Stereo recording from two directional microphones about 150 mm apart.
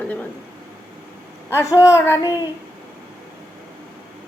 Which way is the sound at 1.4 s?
15° left (ahead or behind).